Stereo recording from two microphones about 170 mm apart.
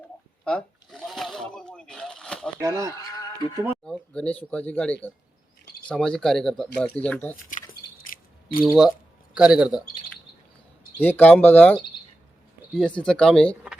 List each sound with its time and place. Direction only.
0.4 s a sound: 5° left (ahead or behind)
2.6 s speech: 20° right (ahead or behind)
2.9 s a sound: 20° left (ahead or behind)
3.8 s speech: 5° left (ahead or behind)
8.6 s speech: centre (ahead or behind)
11.0 s speech: 10° left (ahead or behind)